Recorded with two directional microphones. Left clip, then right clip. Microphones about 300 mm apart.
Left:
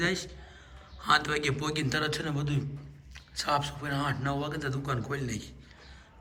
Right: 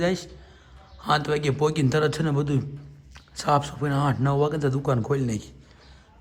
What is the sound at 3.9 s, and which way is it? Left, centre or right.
A man's voice, right.